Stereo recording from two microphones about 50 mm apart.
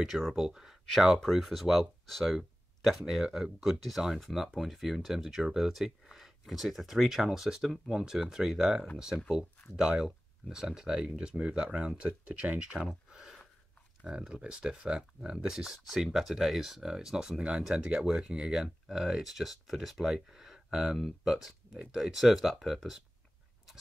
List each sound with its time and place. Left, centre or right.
0.0 s speech: centre
7.2 s speech: centre
12.8 s a sound: centre
14.0 s speech: centre